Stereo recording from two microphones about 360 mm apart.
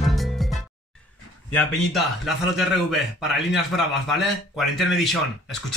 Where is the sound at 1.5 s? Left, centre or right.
Centre.